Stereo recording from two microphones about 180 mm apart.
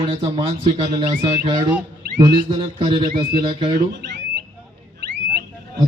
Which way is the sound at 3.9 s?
75° right (ahead or behind).